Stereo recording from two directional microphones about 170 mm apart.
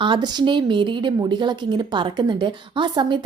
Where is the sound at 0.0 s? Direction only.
25° right (ahead or behind).